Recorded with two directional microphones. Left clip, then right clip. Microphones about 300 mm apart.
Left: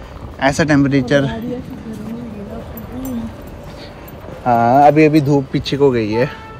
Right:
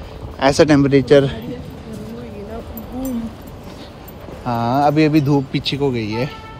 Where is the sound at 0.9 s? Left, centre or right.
Centre.